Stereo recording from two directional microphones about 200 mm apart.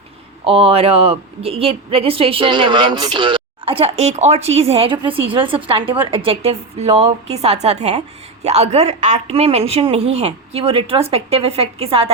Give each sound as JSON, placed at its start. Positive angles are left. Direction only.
{"t": 0.4, "sound": "a woman's voice", "side_deg": -30}